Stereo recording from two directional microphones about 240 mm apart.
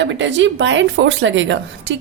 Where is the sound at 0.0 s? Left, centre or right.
Right.